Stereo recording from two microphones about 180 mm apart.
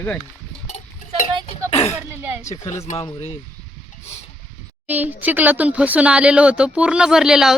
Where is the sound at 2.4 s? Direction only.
15° left (ahead or behind).